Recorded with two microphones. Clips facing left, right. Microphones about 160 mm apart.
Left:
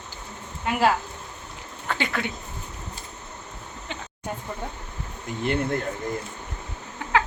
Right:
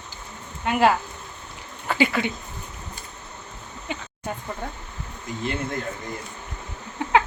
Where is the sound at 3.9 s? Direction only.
10° right (ahead or behind).